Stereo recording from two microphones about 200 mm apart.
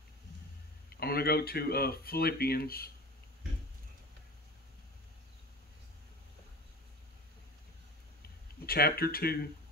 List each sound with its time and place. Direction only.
0.9 s speech: 50° left (ahead or behind)
8.6 s speech: 50° left (ahead or behind)